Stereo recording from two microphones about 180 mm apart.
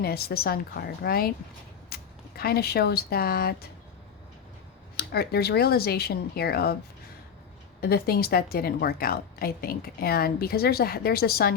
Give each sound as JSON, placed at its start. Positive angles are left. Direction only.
{"t": 0.0, "sound": "a woman's voice", "side_deg": 60}
{"t": 4.9, "sound": "a woman's voice", "side_deg": 60}
{"t": 7.8, "sound": "a woman's voice", "side_deg": 60}